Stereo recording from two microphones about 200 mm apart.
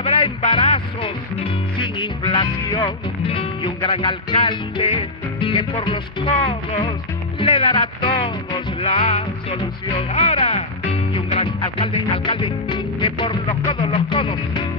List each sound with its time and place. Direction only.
0.0 s music: 30° left (ahead or behind)
1.8 s speech: 25° left (ahead or behind)
7.3 s music: 25° left (ahead or behind)